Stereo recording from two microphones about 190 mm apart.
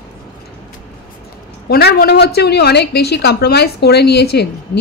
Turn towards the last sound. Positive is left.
turn(degrees=60)  # may be behind; listen again after turning